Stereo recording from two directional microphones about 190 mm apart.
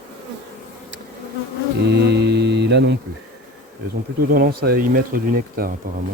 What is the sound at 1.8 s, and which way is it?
Mantra, 60° right (ahead or behind).